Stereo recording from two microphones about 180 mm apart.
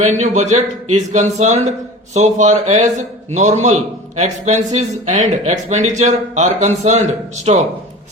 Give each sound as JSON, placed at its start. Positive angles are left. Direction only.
{"t": 0.0, "sound": "speech", "side_deg": -40}